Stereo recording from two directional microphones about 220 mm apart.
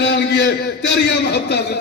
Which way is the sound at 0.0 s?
50° left (ahead or behind).